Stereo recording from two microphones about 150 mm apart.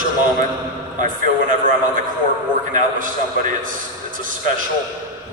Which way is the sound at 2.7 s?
60° right (ahead or behind).